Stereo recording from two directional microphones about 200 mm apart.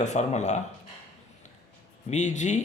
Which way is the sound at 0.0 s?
35° left (ahead or behind).